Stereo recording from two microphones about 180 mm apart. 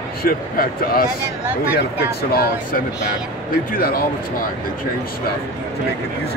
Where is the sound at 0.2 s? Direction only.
55° left (ahead or behind).